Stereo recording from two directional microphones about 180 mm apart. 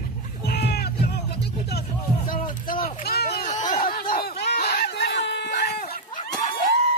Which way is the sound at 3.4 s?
45° left (ahead or behind).